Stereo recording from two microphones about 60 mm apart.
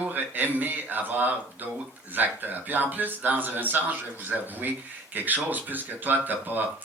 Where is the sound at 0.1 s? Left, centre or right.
Right.